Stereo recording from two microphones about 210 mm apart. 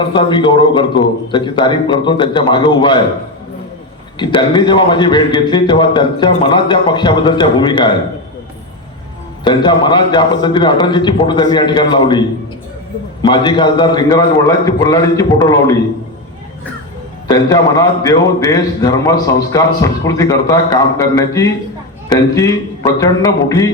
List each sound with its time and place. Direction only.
0.1 s a man's voice: 20° left (ahead or behind)
4.2 s a man's voice: 20° left (ahead or behind)
9.4 s a man's voice: 20° left (ahead or behind)
13.2 s a man's voice: 20° left (ahead or behind)
17.2 s a man's voice: 15° left (ahead or behind)